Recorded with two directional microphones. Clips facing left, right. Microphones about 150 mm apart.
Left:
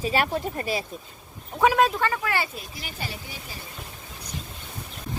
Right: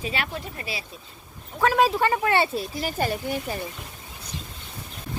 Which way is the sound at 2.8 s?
50° right (ahead or behind).